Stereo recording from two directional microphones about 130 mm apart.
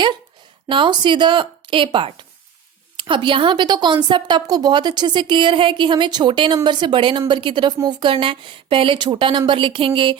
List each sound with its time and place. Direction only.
0.7 s a woman's voice: 40° right (ahead or behind)